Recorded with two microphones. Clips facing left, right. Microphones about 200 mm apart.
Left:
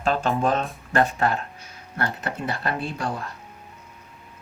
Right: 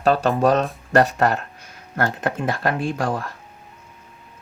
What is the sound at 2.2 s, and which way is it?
Speech, 50° right (ahead or behind).